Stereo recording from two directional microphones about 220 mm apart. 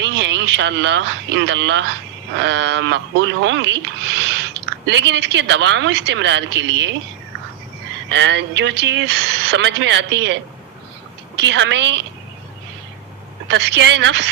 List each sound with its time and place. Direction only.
0.0 s speech: 55° right (ahead or behind)
8.1 s speech: 55° right (ahead or behind)
11.3 s speech: 55° right (ahead or behind)
13.5 s speech: 50° right (ahead or behind)